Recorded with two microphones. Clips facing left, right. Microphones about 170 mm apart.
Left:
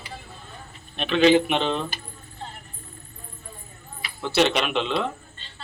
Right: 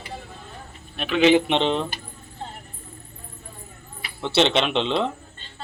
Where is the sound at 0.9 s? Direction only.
5° right (ahead or behind).